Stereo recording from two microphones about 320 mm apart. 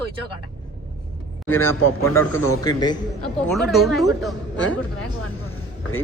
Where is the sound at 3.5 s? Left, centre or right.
Centre.